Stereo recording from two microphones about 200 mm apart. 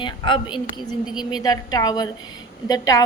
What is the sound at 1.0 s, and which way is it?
Speech, 5° right (ahead or behind).